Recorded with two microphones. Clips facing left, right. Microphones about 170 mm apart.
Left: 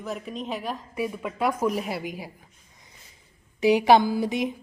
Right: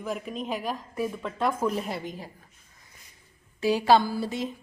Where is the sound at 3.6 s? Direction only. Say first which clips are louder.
Left 3 dB; 15° left (ahead or behind).